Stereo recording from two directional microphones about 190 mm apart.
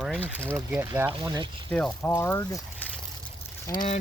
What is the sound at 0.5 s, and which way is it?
Speech, 15° right (ahead or behind).